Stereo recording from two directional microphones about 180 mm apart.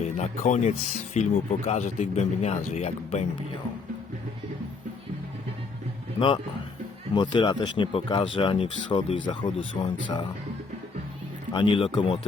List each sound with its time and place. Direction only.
0.2 s speech: 40° left (ahead or behind)
6.1 s speech: 30° left (ahead or behind)
11.5 s speech: 30° left (ahead or behind)